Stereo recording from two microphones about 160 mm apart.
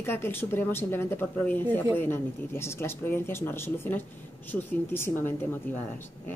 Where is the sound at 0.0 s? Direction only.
15° left (ahead or behind).